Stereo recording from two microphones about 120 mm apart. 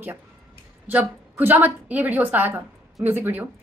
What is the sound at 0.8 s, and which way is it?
A woman's voice, 15° right (ahead or behind).